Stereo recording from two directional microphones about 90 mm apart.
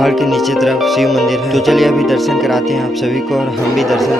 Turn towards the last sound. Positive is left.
turn(degrees=0)  # may be behind; listen again after turning